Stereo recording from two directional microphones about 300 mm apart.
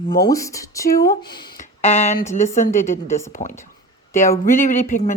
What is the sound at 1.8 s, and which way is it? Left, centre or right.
Speech, left.